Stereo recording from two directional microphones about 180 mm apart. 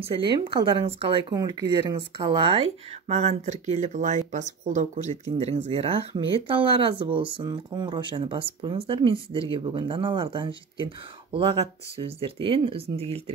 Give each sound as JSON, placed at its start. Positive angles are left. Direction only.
{"t": 0.0, "sound": "speech", "side_deg": -30}
{"t": 1.3, "sound": "speech", "side_deg": -20}